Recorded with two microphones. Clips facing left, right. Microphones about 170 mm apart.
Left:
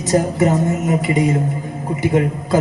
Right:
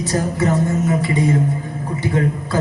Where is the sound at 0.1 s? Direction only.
15° left (ahead or behind).